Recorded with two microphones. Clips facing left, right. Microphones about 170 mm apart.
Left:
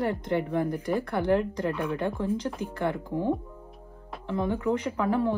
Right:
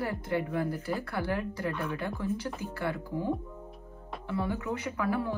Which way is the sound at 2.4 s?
30° left (ahead or behind).